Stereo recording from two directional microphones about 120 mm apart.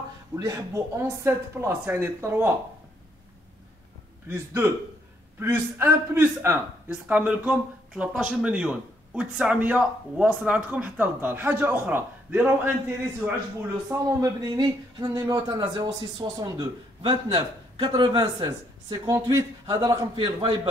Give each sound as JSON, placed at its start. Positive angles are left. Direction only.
{"t": 0.4, "sound": "speech", "side_deg": -25}
{"t": 4.3, "sound": "a man's voice", "side_deg": -20}
{"t": 13.8, "sound": "speech", "side_deg": -30}